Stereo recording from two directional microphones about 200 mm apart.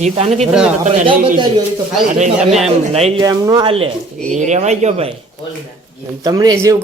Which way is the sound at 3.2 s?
20° right (ahead or behind).